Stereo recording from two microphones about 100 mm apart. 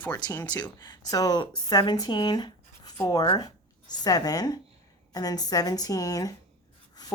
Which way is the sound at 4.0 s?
40° left (ahead or behind).